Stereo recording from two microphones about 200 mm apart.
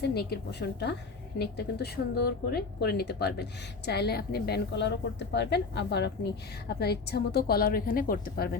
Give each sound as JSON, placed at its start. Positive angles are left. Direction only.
{"t": 0.0, "sound": "a woman's voice", "side_deg": 55}